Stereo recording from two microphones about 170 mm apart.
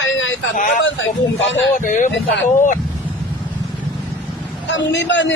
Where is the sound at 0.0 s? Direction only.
90° left.